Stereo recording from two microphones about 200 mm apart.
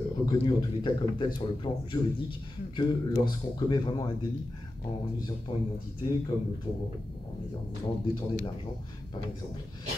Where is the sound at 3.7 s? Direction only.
20° left (ahead or behind).